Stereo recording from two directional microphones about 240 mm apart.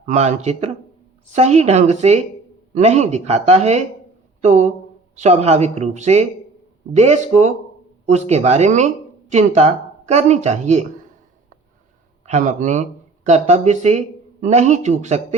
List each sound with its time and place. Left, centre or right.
0.0 s speech: right
12.2 s speech: right